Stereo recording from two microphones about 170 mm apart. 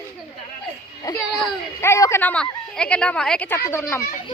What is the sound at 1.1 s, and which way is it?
A woman's voice, 20° left (ahead or behind).